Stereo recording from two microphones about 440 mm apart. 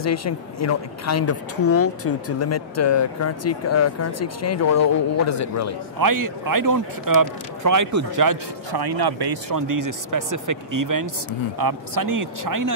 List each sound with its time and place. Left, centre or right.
0.0 s speech: left
5.9 s speech: right